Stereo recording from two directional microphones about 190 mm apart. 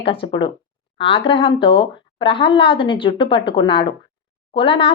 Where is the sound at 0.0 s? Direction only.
30° left (ahead or behind).